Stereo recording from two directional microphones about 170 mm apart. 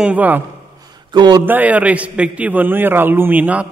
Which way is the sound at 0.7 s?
25° right (ahead or behind).